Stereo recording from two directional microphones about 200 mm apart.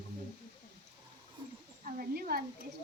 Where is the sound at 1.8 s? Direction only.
45° right (ahead or behind).